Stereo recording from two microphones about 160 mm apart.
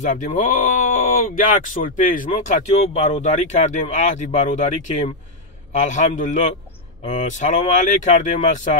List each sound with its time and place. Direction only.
0.0 s speech: 50° left (ahead or behind)